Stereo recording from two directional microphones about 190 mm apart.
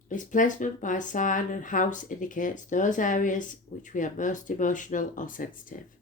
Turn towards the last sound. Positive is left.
turn(degrees=45)  # may be behind; listen again after turning